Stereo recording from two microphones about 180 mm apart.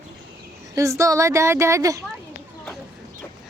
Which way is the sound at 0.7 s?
15° right (ahead or behind).